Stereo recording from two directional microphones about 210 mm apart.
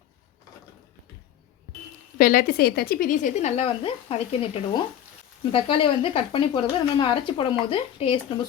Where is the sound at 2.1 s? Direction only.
40° left (ahead or behind).